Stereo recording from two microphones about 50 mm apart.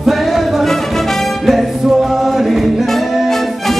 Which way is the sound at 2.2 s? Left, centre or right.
Centre.